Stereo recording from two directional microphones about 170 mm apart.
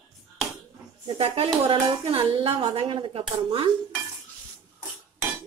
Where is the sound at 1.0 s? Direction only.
35° right (ahead or behind).